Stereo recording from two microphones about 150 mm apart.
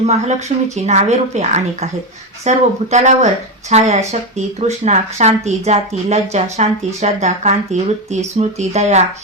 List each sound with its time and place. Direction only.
0.0 s speech: 45° right (ahead or behind)